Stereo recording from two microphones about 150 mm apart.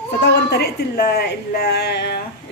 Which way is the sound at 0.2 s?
90° left.